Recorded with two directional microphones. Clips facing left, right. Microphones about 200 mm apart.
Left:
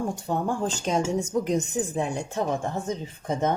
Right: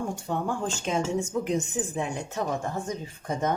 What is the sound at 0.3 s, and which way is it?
Speech, 35° left (ahead or behind).